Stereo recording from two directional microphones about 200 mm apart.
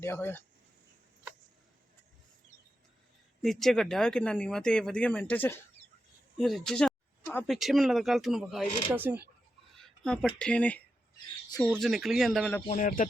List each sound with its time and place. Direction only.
0.0 s speech: 10° left (ahead or behind)
3.4 s speech: centre (ahead or behind)
9.7 s a sound: 5° left (ahead or behind)
10.3 s speech: 5° left (ahead or behind)
12.7 s speech: 40° left (ahead or behind)